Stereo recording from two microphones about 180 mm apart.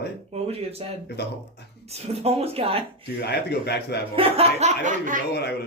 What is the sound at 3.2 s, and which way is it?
Speech, 65° left (ahead or behind).